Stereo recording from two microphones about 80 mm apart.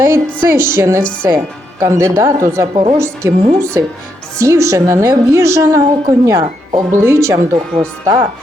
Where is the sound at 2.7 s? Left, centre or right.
Right.